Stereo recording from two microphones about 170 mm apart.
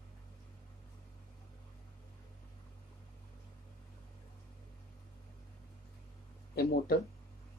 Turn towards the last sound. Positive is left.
turn(degrees=65)  # may be behind; listen again after turning